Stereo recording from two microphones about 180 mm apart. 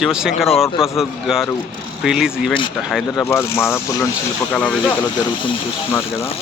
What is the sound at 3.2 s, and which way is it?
Speech, 15° left (ahead or behind).